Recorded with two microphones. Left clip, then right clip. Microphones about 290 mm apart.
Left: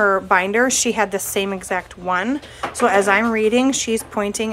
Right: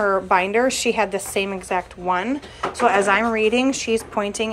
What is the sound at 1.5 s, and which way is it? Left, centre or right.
Speech, centre.